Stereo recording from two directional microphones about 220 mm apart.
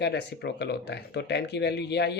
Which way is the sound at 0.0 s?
50° left (ahead or behind).